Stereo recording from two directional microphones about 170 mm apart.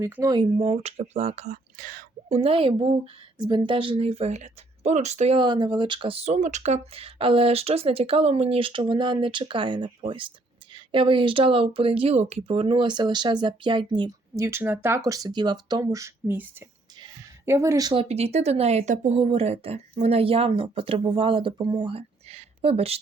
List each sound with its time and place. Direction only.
0.0 s speech: 20° right (ahead or behind); by 2.4 s 50° right (ahead or behind)
2.4 s speech: 35° right (ahead or behind)
5.4 s a woman's voice: 25° right (ahead or behind)
18.1 s speech: 40° right (ahead or behind)